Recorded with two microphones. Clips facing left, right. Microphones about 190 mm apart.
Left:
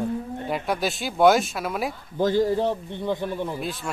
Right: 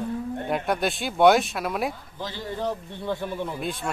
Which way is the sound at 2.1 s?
50° left (ahead or behind).